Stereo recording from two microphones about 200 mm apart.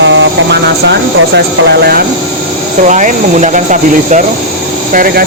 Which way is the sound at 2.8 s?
40° right (ahead or behind).